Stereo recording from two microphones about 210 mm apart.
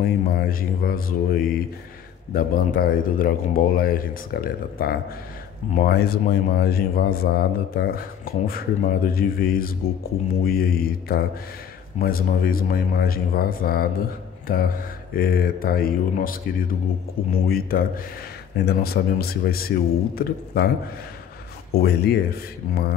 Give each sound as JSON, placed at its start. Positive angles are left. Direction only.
{"t": 0.0, "sound": "speech", "side_deg": 45}
{"t": 21.7, "sound": "speech", "side_deg": 50}